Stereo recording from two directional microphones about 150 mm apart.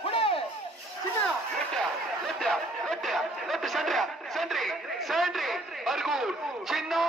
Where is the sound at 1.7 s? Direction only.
Centre (ahead or behind).